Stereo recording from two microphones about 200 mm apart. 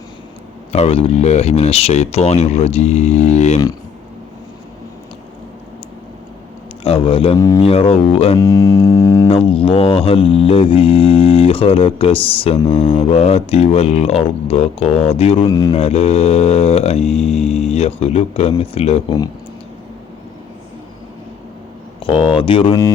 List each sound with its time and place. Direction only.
0.7 s mantra: 30° left (ahead or behind)
6.8 s didgeridoo: 30° left (ahead or behind)
7.3 s music: 15° left (ahead or behind)
7.6 s didgeridoo: 30° left (ahead or behind)
8.4 s music: 15° left (ahead or behind)
9.3 s didgeridoo: 25° left (ahead or behind)
15.4 s didgeridoo: 20° left (ahead or behind)
15.7 s mantra: 30° left (ahead or behind)
22.0 s didgeridoo: 25° left (ahead or behind)